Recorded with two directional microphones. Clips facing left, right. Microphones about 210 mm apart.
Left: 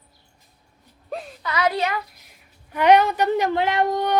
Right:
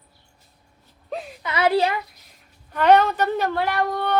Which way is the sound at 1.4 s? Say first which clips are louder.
Right 3 dB; 25° right (ahead or behind).